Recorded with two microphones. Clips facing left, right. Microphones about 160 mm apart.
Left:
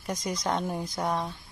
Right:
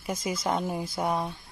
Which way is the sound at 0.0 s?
5° right (ahead or behind).